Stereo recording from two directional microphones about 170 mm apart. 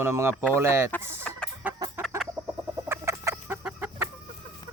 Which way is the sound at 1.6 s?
10° right (ahead or behind).